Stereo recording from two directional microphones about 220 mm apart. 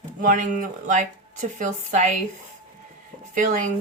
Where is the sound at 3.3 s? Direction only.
35° right (ahead or behind).